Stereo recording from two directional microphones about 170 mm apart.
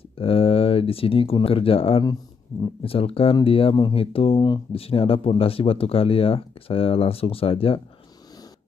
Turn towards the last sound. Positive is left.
turn(degrees=35)  # may be behind; listen again after turning